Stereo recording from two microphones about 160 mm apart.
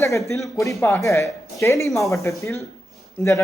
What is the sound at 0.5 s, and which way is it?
A woman's voice, 20° left (ahead or behind).